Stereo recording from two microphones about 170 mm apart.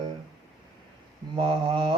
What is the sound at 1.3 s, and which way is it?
Mantra, 30° right (ahead or behind).